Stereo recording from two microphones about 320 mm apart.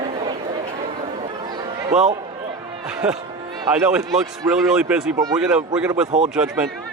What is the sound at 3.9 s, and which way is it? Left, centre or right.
A man's voice, centre.